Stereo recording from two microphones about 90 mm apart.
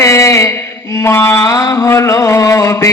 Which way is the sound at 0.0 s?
35° left (ahead or behind).